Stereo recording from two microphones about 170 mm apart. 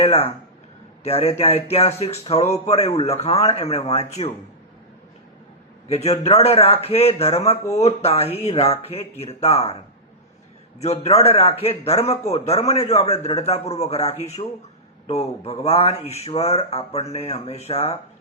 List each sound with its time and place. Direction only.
0.0 s speech: 35° left (ahead or behind)
5.9 s speech: 35° left (ahead or behind)
11.0 s speech: 35° left (ahead or behind)